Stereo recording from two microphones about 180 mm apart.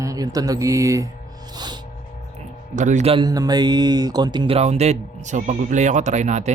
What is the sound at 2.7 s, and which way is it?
Speech, 45° right (ahead or behind).